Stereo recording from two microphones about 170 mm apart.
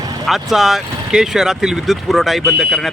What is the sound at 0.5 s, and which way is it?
Speech, centre (ahead or behind).